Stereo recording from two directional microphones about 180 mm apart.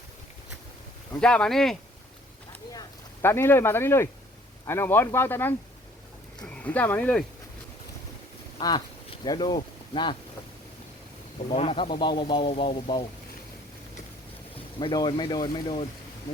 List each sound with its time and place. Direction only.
1.2 s speech: 5° left (ahead or behind)
2.7 s speech: 15° left (ahead or behind)
8.5 s speech: 25° left (ahead or behind)
11.4 s speech: 35° left (ahead or behind)
14.8 s speech: 25° left (ahead or behind)